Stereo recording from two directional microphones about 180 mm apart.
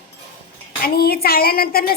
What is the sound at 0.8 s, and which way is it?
A woman's voice, 60° left (ahead or behind).